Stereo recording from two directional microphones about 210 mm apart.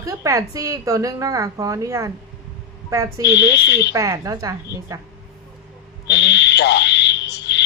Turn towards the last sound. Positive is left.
turn(degrees=55)  # may be behind; listen again after turning